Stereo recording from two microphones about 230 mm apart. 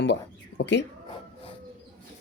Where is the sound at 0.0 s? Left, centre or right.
Left.